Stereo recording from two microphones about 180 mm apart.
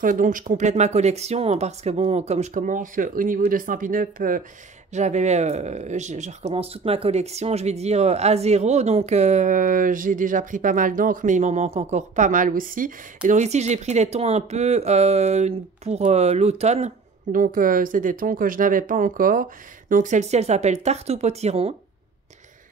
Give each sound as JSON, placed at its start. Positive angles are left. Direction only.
{"t": 0.0, "sound": "speech", "side_deg": -45}